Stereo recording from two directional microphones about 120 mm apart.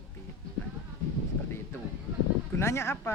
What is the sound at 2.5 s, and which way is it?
Speech, 20° left (ahead or behind).